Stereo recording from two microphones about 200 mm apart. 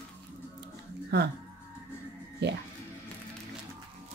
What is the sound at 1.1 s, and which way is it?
Speech, 55° right (ahead or behind).